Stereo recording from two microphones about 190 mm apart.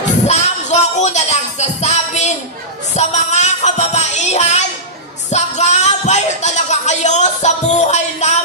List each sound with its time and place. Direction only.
0.3 s music: 35° left (ahead or behind)
5.3 s speech: 35° left (ahead or behind)